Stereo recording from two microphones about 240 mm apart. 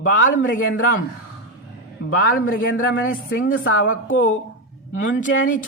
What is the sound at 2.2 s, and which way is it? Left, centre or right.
Speech, left.